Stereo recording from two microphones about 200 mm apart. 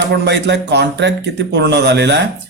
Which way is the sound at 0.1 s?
60° right (ahead or behind).